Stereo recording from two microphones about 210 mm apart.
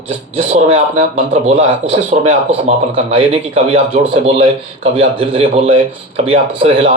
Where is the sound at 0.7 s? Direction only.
25° right (ahead or behind).